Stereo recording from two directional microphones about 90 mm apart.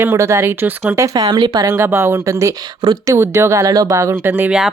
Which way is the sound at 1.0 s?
45° right (ahead or behind).